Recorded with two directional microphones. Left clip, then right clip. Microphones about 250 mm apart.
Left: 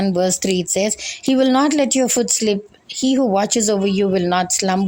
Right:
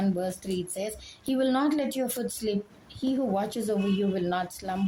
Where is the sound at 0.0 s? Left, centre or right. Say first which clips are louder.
Left 13 dB; left.